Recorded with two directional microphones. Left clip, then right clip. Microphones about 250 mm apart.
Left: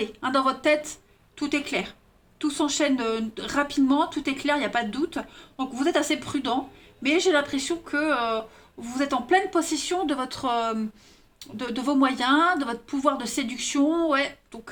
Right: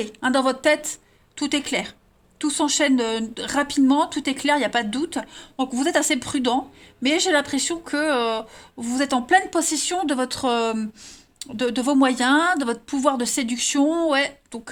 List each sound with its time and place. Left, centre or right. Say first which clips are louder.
0.0 s speech: right 3 dB; right